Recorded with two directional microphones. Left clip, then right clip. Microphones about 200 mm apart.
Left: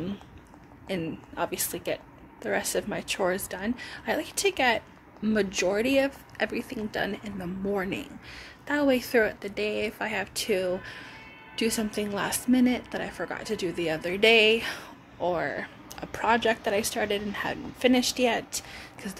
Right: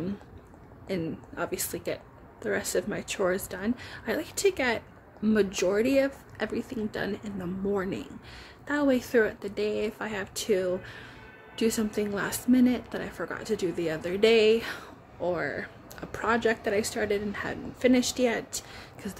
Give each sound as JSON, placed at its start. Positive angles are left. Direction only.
{"t": 0.8, "sound": "speech", "side_deg": -20}